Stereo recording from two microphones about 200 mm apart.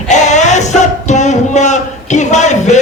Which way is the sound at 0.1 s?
35° left (ahead or behind).